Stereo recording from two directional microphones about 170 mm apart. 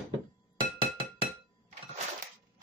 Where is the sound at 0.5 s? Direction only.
30° right (ahead or behind).